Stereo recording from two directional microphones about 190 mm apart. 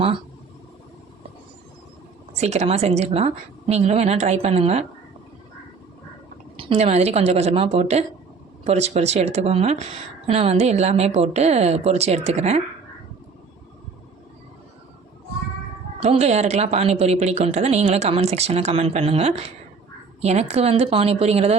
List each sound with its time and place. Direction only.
2.4 s a woman's voice: 35° right (ahead or behind)
6.6 s a woman's voice: 30° right (ahead or behind)
16.0 s a woman's voice: 35° right (ahead or behind)